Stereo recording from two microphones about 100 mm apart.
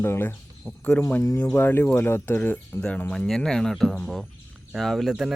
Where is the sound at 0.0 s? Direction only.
25° left (ahead or behind).